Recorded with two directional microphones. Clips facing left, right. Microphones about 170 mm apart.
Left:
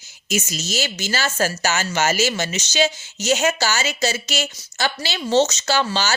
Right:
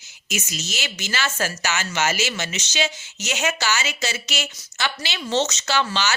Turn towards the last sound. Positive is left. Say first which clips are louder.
# left 2 dB
turn(degrees=35)  # may be behind; listen again after turning